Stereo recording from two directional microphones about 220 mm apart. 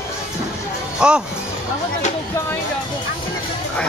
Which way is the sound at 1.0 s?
5° right (ahead or behind).